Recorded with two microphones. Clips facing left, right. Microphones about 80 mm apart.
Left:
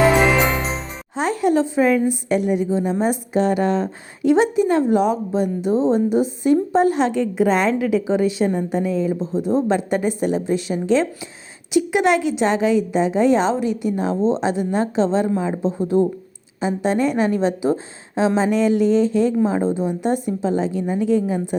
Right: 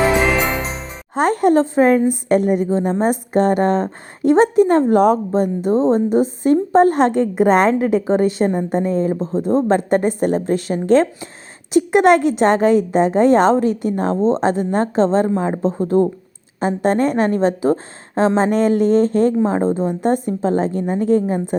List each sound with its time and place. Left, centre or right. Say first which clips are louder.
1.1 s a woman's voice: right 4 dB; right